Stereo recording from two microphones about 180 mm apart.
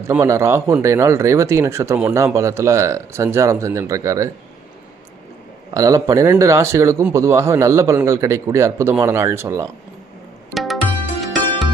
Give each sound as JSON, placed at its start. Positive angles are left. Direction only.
{"t": 0.1, "sound": "speech", "side_deg": -15}
{"t": 5.7, "sound": "speech", "side_deg": -20}
{"t": 10.5, "sound": "music", "side_deg": 0}